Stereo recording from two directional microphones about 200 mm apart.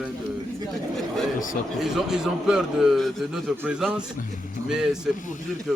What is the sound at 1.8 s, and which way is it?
Speech, centre (ahead or behind).